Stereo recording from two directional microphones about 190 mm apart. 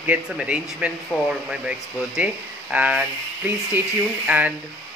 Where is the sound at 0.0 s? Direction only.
5° right (ahead or behind).